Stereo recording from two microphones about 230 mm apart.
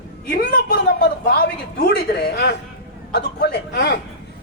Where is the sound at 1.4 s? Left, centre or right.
Left.